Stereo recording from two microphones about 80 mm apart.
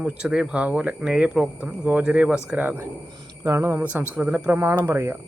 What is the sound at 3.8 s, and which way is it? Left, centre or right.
Speech, centre.